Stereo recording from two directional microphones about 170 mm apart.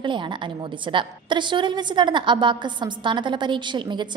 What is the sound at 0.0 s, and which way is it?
A woman's voice, 30° right (ahead or behind).